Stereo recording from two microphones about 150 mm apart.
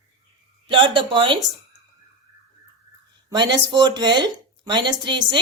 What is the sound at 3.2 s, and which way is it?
A woman's voice, 30° right (ahead or behind).